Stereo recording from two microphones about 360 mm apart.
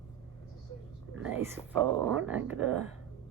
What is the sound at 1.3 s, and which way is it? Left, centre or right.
Speech, centre.